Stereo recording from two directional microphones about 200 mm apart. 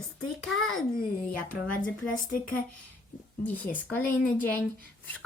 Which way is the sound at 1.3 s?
45° left (ahead or behind).